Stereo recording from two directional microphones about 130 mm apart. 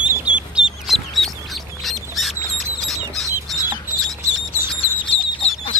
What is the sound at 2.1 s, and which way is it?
Duck, centre (ahead or behind).